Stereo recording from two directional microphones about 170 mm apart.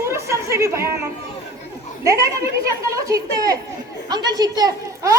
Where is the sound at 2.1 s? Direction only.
20° right (ahead or behind).